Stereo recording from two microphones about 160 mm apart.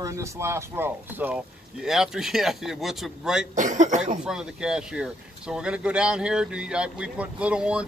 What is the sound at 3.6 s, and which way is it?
Speech, 50° right (ahead or behind).